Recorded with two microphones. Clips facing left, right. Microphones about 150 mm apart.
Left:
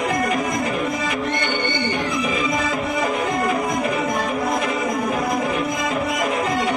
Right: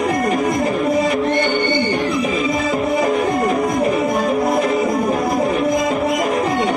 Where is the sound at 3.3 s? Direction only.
30° right (ahead or behind).